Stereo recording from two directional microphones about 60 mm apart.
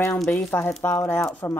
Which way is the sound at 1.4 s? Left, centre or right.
Left.